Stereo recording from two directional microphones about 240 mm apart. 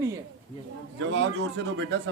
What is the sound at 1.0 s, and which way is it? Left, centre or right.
Speech, right.